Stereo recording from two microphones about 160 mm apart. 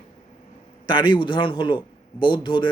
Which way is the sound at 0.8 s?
30° left (ahead or behind).